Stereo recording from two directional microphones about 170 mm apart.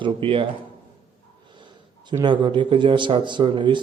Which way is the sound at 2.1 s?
25° right (ahead or behind).